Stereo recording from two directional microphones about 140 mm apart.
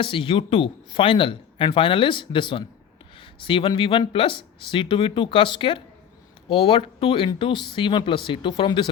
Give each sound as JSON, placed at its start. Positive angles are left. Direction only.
{"t": 0.0, "sound": "speech", "side_deg": 40}